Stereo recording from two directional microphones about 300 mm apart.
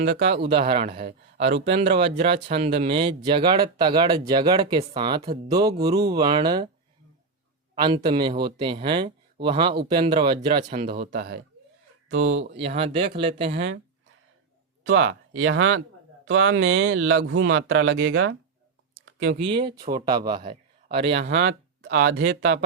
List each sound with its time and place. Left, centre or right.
0.1 s speech: right
0.5 s speech: centre
7.8 s speech: centre; by 12.5 s right
12.7 s speech: centre
13.5 s speech: right
14.8 s speech: right
19.0 s a sound: right
19.4 s speech: centre
21.1 s speech: right